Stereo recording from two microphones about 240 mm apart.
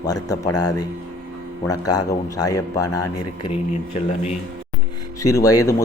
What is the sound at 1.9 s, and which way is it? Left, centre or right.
A man's voice, centre.